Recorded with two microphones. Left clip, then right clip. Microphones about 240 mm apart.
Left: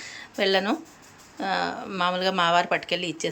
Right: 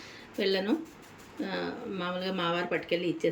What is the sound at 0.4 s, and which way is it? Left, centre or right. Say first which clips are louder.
Speech: left 6 dB; left.